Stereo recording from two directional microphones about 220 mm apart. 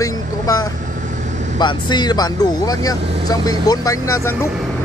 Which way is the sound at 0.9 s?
35° right (ahead or behind).